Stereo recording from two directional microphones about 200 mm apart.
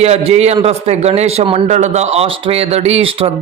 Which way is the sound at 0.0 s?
30° right (ahead or behind).